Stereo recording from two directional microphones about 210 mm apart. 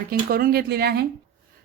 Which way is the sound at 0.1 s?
45° right (ahead or behind).